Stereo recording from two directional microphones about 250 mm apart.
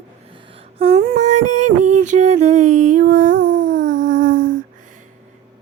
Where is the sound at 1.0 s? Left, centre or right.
Right.